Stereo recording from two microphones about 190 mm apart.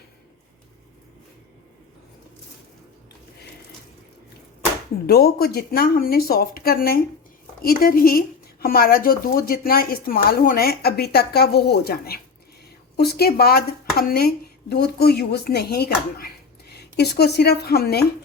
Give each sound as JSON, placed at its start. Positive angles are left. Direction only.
{"t": 5.0, "sound": "speech", "side_deg": 55}